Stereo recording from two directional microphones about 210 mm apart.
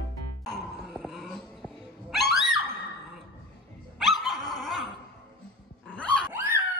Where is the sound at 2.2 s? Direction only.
Centre (ahead or behind).